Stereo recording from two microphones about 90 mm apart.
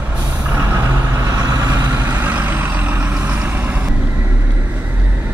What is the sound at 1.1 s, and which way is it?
Vehicle, 45° right (ahead or behind).